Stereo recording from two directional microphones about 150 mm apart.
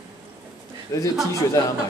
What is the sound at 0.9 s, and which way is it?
Speech, 20° left (ahead or behind).